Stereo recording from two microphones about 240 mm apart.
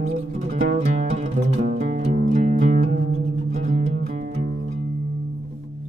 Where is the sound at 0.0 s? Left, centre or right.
Right.